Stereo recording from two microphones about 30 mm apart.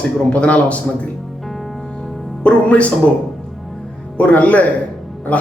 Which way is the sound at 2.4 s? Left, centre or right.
Left.